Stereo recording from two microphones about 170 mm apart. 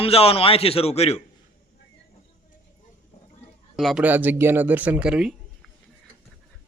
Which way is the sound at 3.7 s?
Centre (ahead or behind).